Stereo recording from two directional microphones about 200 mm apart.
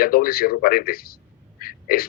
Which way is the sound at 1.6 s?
45° left (ahead or behind).